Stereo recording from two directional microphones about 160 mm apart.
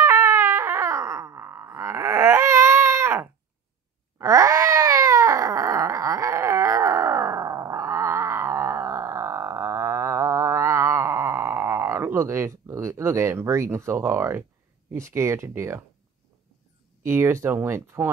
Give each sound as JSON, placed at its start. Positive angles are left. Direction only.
{"t": 0.0, "sound": "a sound", "side_deg": -20}
{"t": 14.9, "sound": "speech", "side_deg": -15}
{"t": 17.0, "sound": "speech", "side_deg": -15}